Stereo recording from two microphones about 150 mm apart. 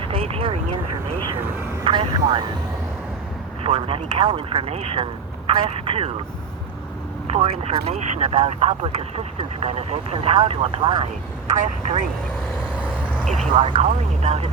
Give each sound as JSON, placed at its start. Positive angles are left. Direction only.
{"t": 0.0, "sound": "vehicle", "side_deg": -40}
{"t": 1.8, "sound": "vehicle", "side_deg": -35}
{"t": 3.6, "sound": "speech", "side_deg": -40}
{"t": 7.3, "sound": "speech", "side_deg": -45}
{"t": 13.2, "sound": "speech", "side_deg": 0}
{"t": 13.6, "sound": "speech", "side_deg": -40}